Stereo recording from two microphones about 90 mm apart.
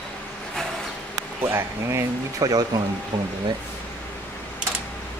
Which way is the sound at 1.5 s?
35° right (ahead or behind).